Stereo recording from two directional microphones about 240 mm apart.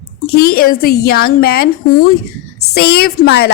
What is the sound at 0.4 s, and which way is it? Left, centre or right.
A woman's voice, left.